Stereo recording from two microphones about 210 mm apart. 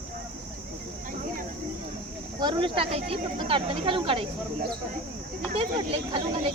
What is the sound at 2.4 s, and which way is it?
Speech, 20° right (ahead or behind).